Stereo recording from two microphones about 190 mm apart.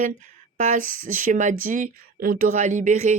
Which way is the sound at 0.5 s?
45° right (ahead or behind).